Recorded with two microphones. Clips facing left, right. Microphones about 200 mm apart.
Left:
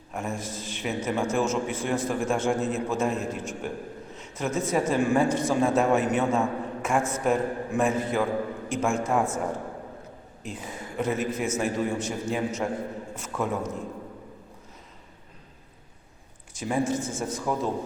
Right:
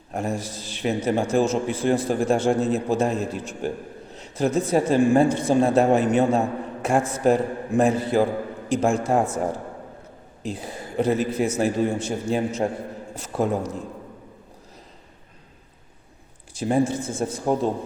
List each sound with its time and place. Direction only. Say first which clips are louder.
0.1 s a woman's voice: right 5 dB; 35° right (ahead or behind)
10.4 s a woman's voice: right 5 dB; 35° right (ahead or behind)
16.6 s a woman's voice: right 5 dB; 35° right (ahead or behind)
17.0 s speech: right 4 dB; 55° right (ahead or behind)
17.4 s speech: right 6 dB; 30° right (ahead or behind)